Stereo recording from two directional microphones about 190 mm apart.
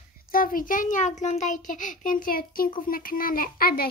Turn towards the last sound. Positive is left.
turn(degrees=50)  # may be behind; listen again after turning